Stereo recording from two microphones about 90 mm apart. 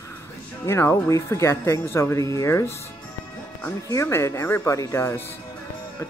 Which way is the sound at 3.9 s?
30° left (ahead or behind).